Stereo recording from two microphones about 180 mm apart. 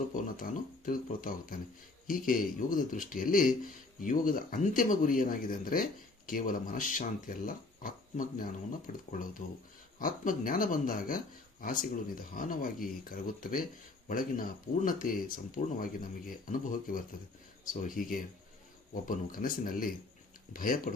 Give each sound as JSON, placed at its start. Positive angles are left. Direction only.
{"t": 0.1, "sound": "speech", "side_deg": 50}